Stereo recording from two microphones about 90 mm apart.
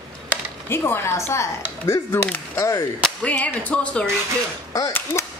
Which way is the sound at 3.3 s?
15° left (ahead or behind).